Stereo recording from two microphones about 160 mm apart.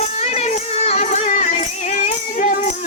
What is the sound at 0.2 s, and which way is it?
Music, 40° left (ahead or behind).